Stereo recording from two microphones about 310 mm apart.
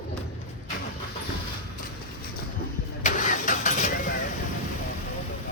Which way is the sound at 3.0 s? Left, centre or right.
Left.